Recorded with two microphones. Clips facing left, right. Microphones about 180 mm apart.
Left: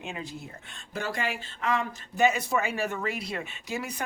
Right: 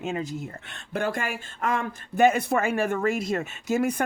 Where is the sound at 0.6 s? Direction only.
60° right (ahead or behind).